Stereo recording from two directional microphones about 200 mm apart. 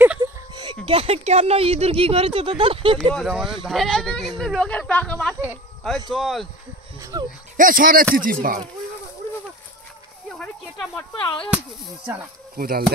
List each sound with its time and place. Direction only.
0.0 s a sound: 10° right (ahead or behind)
0.8 s speech: 30° right (ahead or behind)
3.2 s speech: centre (ahead or behind)
5.3 s a sound: 10° right (ahead or behind)
6.1 s speech: centre (ahead or behind)
7.0 s dog: 15° right (ahead or behind)
7.5 s speech: 45° right (ahead or behind)
11.2 s whip: 25° left (ahead or behind)
12.5 s speech: 45° right (ahead or behind)